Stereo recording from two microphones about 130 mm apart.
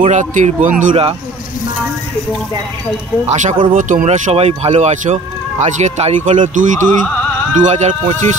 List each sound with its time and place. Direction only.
0.0 s speech: 70° right (ahead or behind)
3.3 s speech: 65° right (ahead or behind)
6.2 s speech: 75° right (ahead or behind)
7.5 s speech: 65° right (ahead or behind)